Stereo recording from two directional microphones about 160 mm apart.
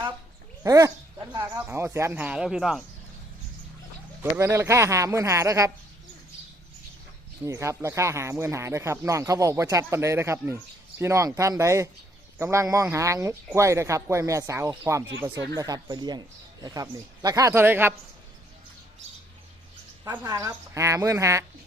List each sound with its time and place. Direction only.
0.6 s speech: 20° right (ahead or behind); by 2.8 s centre (ahead or behind)
4.2 s speech: 15° right (ahead or behind)
7.4 s speech: 20° right (ahead or behind)
20.1 s speech: 20° right (ahead or behind)